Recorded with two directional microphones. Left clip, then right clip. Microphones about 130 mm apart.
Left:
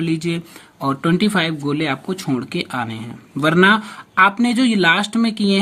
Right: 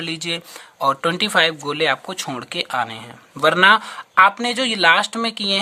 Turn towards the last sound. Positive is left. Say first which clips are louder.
# left 1 dB
turn(degrees=-30)  # may be behind; listen again after turning